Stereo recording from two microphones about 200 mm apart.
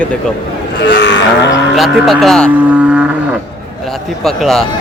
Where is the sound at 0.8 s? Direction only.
60° left (ahead or behind).